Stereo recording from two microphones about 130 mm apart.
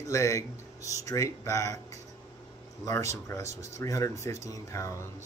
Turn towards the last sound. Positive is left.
turn(degrees=25)  # may be behind; listen again after turning